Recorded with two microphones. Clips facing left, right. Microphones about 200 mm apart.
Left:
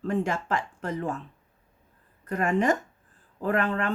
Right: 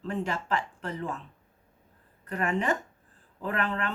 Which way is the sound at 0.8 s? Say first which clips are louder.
Left 4 dB; 45° left (ahead or behind).